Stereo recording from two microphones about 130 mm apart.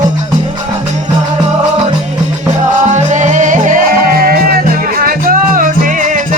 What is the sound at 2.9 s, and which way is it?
Music, 65° right (ahead or behind).